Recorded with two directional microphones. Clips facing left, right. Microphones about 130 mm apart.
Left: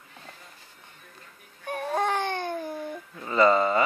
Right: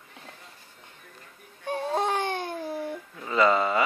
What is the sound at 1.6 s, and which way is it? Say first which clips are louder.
Baby cry: even; 20° right (ahead or behind).